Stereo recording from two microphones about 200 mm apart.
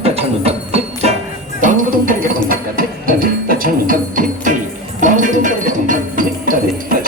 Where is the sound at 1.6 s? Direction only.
45° right (ahead or behind).